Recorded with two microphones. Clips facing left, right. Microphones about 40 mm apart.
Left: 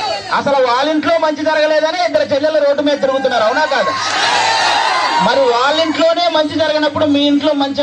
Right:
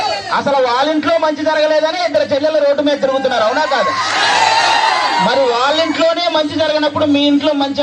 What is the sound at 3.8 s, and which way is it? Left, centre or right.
Speech, right.